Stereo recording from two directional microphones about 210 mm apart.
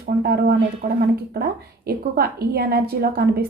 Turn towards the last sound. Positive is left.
turn(degrees=-50)  # may be behind; listen again after turning